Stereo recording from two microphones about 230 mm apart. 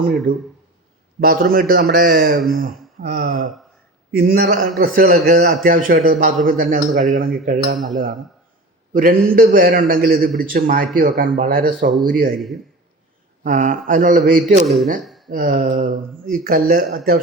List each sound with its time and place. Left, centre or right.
0.0 s speech: centre
1.2 s a man's voice: right
8.9 s a man's voice: right
13.4 s a man's voice: right
14.6 s speech: centre
15.3 s a man's voice: right